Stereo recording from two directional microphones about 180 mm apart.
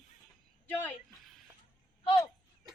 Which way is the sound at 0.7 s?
10° left (ahead or behind).